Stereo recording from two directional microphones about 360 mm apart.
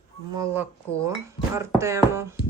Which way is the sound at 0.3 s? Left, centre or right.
Centre.